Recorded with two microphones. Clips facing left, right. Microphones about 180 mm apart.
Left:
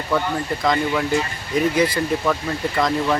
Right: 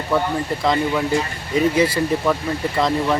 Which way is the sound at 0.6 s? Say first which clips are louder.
Right 1 dB; 5° right (ahead or behind).